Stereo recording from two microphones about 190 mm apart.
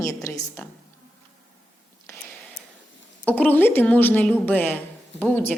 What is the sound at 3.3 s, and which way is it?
A woman's voice, 10° left (ahead or behind).